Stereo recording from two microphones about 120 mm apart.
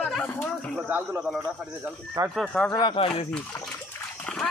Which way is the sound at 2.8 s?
50° left (ahead or behind).